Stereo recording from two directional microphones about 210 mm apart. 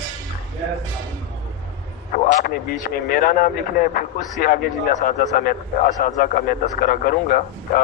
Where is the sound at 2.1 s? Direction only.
40° left (ahead or behind).